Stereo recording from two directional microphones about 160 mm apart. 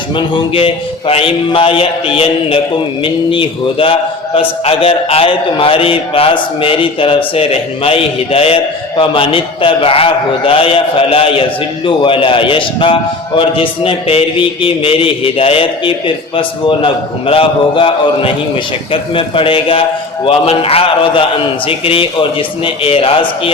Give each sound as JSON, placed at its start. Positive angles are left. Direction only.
{"t": 0.2, "sound": "a man's voice", "side_deg": 30}